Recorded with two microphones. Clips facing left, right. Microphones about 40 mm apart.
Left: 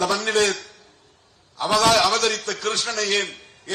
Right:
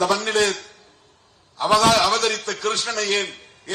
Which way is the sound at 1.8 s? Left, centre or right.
Right.